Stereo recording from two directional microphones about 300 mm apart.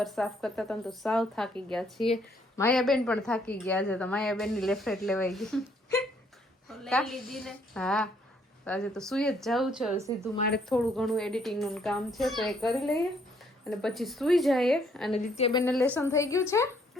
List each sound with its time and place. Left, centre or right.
0.0 s a woman's voice: centre
6.7 s a woman's voice: centre
10.3 s a woman's voice: left
10.7 s a woman's voice: centre
15.1 s a woman's voice: centre
15.6 s a woman's voice: centre